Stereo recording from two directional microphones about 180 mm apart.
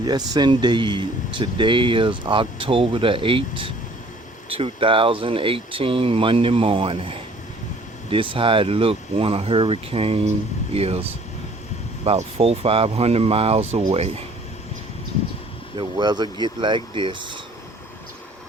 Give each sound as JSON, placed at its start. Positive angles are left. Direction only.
{"t": 0.0, "sound": "speech", "side_deg": -25}
{"t": 12.0, "sound": "speech", "side_deg": -35}
{"t": 15.8, "sound": "speech", "side_deg": -25}